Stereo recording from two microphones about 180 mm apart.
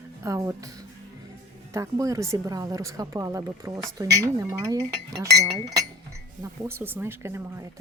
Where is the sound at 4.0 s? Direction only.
20° right (ahead or behind).